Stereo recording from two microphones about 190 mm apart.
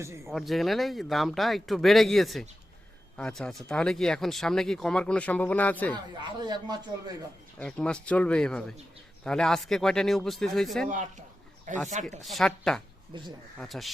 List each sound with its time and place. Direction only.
0.3 s speech: centre (ahead or behind)
5.9 s speech: 25° right (ahead or behind)
7.6 s speech: 5° left (ahead or behind)
11.7 s speech: 40° right (ahead or behind)
12.2 s speech: centre (ahead or behind)